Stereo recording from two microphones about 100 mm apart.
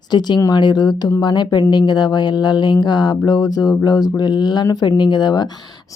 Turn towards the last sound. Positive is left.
turn(degrees=45)  # may be behind; listen again after turning